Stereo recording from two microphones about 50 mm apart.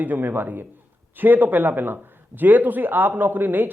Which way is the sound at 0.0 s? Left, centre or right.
Right.